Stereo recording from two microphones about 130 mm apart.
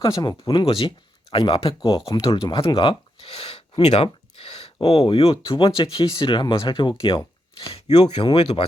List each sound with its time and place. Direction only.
0.0 s speech: 40° left (ahead or behind)